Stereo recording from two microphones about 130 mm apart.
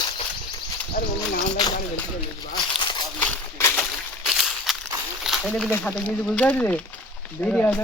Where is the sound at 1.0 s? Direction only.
90° left.